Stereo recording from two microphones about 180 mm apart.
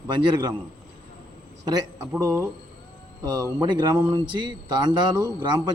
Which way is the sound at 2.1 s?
15° right (ahead or behind).